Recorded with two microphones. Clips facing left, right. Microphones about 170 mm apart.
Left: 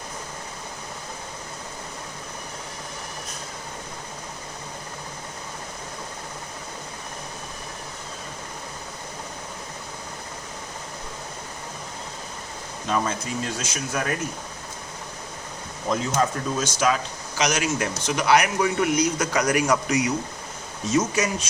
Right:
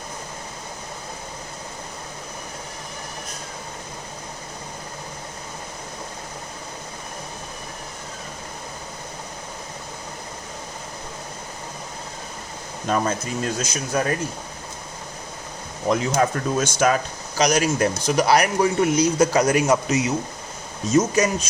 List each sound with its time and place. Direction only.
12.9 s speech: 45° right (ahead or behind)
16.1 s speech: 55° right (ahead or behind); by 20.1 s 25° right (ahead or behind)
20.9 s speech: 40° right (ahead or behind)